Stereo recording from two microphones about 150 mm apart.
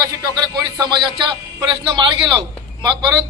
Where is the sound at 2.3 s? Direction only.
30° right (ahead or behind).